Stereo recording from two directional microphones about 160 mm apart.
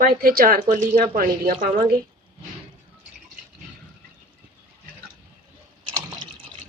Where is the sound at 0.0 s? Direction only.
65° right (ahead or behind).